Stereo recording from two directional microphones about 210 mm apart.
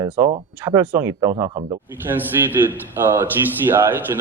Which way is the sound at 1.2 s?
25° right (ahead or behind).